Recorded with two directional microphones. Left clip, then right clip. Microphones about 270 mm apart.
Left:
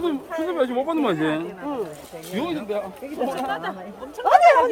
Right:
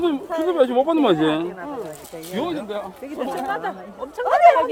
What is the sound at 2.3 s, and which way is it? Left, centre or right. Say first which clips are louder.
Speech: even; centre.